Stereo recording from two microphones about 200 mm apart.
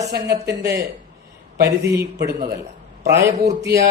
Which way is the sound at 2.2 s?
50° right (ahead or behind).